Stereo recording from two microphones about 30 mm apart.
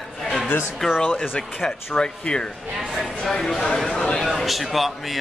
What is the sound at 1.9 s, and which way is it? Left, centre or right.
Speech, left.